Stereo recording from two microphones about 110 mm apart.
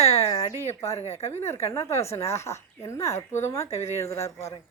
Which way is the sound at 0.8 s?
30° left (ahead or behind).